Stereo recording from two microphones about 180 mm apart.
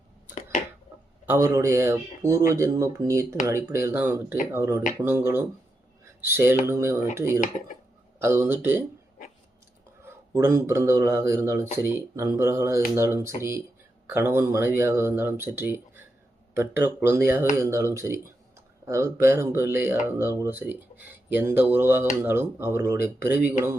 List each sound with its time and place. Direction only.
1.3 s speech: 15° right (ahead or behind)
10.3 s speech: 15° right (ahead or behind)